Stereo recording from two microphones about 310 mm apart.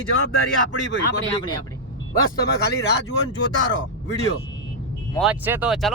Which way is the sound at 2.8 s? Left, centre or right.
Left.